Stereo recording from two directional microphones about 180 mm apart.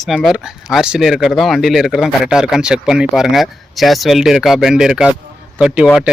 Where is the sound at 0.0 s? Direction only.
Centre (ahead or behind).